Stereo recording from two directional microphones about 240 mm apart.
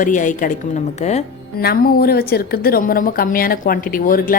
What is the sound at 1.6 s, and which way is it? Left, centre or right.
A woman's voice, left.